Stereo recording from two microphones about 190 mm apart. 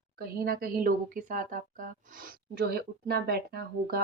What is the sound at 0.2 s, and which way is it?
Speech, 50° right (ahead or behind).